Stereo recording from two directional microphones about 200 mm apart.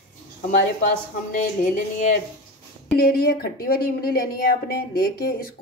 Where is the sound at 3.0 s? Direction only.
50° left (ahead or behind).